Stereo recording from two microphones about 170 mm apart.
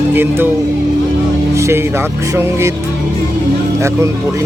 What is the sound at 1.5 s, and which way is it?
Speech, 15° right (ahead or behind).